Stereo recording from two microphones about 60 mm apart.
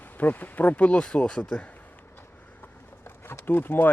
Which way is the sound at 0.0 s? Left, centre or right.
Left.